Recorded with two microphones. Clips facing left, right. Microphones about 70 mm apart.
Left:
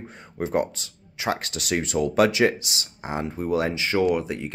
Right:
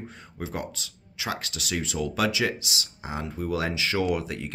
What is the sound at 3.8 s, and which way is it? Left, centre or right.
Speech, centre.